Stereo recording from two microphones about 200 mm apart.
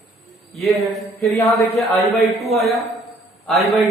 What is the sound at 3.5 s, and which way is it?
Speech, centre (ahead or behind).